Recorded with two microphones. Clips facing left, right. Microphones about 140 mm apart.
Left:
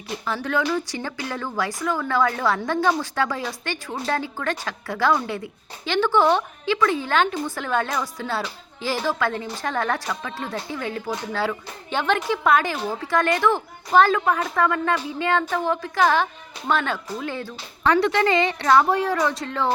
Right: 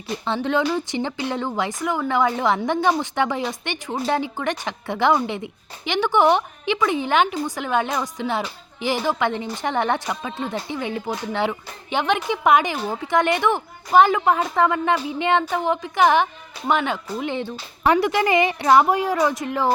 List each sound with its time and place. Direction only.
0.3 s a woman's voice: 25° right (ahead or behind)